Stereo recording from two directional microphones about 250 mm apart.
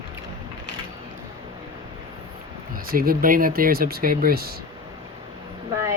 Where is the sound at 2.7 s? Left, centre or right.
Right.